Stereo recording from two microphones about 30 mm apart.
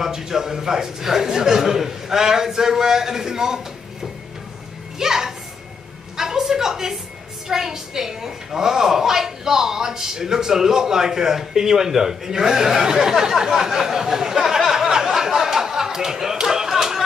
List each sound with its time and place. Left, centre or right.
0.0 s a man's voice: centre
4.9 s music: centre
6.1 s a sound: centre
7.4 s a woman's voice: centre